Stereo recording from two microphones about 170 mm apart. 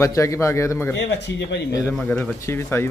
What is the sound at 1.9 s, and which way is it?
Speech, 10° left (ahead or behind).